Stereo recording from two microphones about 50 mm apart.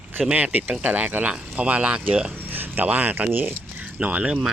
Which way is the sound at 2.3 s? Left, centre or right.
Right.